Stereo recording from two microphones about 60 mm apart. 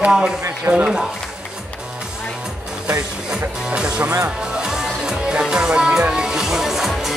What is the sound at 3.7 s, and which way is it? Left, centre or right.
Music, centre.